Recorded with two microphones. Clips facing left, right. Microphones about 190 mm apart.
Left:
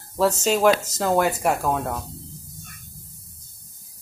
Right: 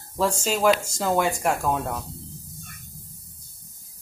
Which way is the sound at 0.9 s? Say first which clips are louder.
Left 2 dB; 5° left (ahead or behind).